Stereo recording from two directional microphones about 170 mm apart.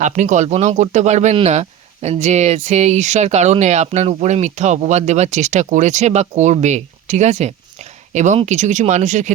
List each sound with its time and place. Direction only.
0.0 s speech: 45° right (ahead or behind)